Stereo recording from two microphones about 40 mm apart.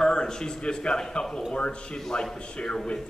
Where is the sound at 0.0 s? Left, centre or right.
Centre.